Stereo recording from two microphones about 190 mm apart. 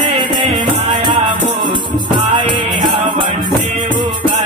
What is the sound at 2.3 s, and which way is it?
Music, 25° right (ahead or behind).